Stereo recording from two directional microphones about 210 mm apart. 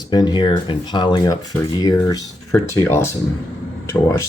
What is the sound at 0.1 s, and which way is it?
Speech, 20° left (ahead or behind).